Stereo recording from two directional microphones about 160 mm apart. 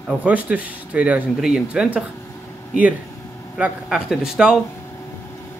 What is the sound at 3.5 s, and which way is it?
Speech, 5° right (ahead or behind).